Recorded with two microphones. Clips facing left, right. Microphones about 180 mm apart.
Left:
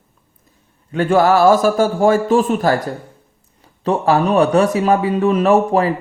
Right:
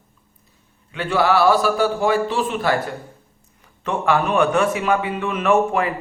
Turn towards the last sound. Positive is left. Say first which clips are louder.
# left 4 dB
turn(degrees=35)  # may be behind; listen again after turning